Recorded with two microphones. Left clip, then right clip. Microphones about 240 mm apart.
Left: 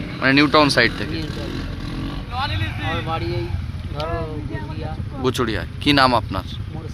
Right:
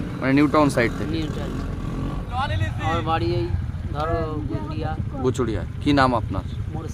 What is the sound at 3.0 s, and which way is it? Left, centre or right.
Speech, centre.